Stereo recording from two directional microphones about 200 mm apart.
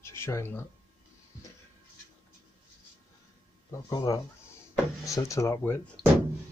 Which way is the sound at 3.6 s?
15° left (ahead or behind).